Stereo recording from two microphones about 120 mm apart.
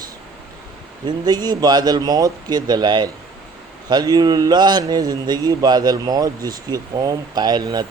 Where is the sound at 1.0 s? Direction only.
35° right (ahead or behind).